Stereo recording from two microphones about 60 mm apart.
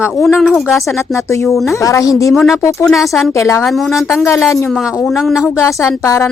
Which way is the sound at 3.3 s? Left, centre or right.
Left.